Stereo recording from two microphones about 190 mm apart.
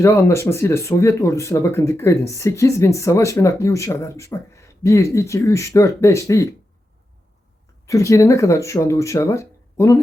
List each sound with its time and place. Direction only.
0.0 s speech: 15° left (ahead or behind)
7.9 s speech: 15° left (ahead or behind)